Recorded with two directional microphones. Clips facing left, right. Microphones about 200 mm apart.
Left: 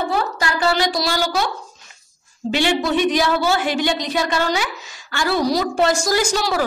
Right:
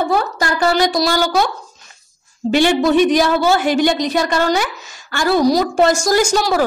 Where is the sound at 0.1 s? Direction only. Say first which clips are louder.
Right 4 dB; 45° right (ahead or behind).